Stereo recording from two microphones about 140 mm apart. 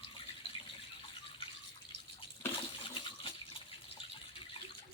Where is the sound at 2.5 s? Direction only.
35° left (ahead or behind).